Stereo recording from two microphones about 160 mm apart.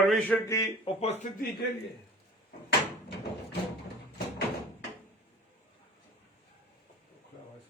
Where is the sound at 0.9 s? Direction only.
45° left (ahead or behind).